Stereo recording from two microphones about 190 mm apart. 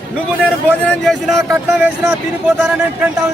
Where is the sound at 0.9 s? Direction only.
Centre (ahead or behind).